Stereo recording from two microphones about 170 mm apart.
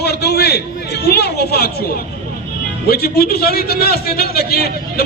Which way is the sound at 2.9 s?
65° left (ahead or behind).